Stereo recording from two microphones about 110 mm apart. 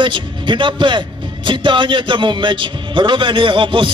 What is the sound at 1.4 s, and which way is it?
Speech, 45° right (ahead or behind).